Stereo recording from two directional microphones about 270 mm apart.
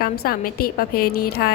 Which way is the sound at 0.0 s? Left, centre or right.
Left.